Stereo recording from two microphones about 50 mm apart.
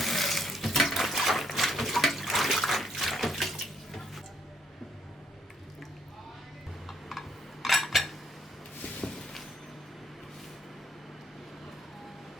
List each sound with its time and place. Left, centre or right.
0.0 s water: centre
6.8 s cutlery: centre
9.0 s a sound: centre